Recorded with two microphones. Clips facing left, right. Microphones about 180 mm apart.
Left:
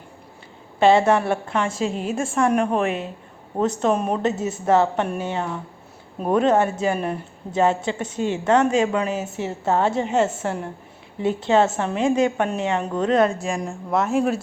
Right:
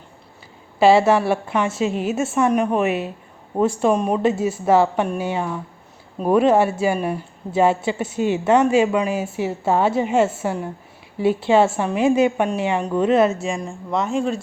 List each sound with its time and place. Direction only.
0.8 s a woman's voice: 5° right (ahead or behind)
4.4 s a woman's voice: 25° left (ahead or behind)
4.6 s a woman's voice: 10° right (ahead or behind)